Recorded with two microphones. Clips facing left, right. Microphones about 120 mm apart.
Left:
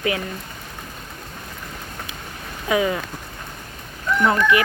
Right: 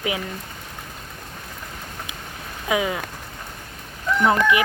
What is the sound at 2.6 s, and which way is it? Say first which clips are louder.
Speech: left 3 dB; 15° right (ahead or behind).